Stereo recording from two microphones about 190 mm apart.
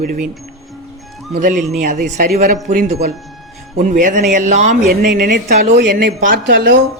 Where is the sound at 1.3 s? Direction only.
40° right (ahead or behind).